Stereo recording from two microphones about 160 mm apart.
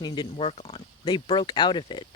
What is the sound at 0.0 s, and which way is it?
Speech, 30° left (ahead or behind).